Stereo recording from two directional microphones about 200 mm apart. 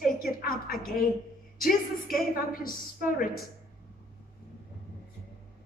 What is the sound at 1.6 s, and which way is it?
Speech, 45° left (ahead or behind).